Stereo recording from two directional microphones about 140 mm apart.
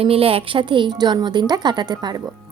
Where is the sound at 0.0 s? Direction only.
40° right (ahead or behind).